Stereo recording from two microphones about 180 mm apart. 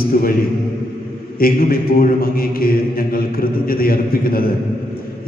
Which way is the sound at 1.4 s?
55° left (ahead or behind).